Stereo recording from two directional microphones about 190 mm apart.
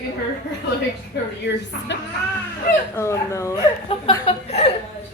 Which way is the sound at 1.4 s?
65° left (ahead or behind).